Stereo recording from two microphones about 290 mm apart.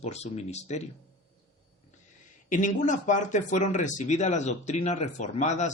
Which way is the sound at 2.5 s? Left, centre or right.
Left.